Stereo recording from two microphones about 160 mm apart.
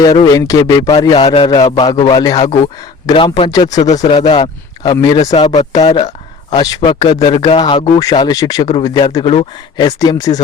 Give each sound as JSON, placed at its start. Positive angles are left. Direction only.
{"t": 0.0, "sound": "a man's voice", "side_deg": 25}
{"t": 5.3, "sound": "speech", "side_deg": 40}
{"t": 6.5, "sound": "a man's voice", "side_deg": 25}